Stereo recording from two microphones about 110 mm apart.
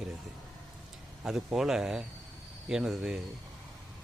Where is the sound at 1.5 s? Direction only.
5° right (ahead or behind).